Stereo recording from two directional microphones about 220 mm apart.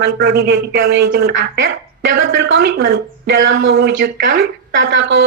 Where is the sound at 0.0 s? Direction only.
45° right (ahead or behind).